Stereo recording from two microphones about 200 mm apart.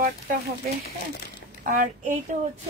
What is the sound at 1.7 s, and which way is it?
Speech, 40° right (ahead or behind).